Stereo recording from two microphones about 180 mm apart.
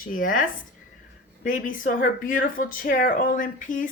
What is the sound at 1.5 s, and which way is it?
A woman's voice, 50° left (ahead or behind).